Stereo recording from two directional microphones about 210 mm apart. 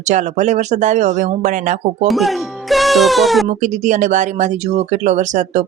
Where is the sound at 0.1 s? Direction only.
35° right (ahead or behind).